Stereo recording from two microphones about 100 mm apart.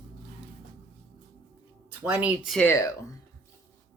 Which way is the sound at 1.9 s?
20° right (ahead or behind).